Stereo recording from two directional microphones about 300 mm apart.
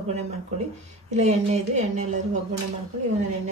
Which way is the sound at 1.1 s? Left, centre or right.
Right.